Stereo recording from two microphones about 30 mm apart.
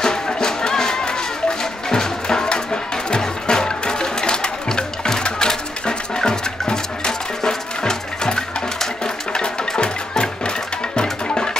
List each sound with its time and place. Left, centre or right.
0.0 s music: left
11.0 s music: left